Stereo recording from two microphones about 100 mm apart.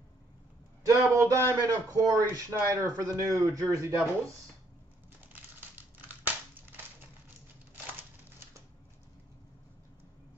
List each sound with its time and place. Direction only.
0.8 s speech: 30° right (ahead or behind)
5.3 s crumpling: 20° right (ahead or behind)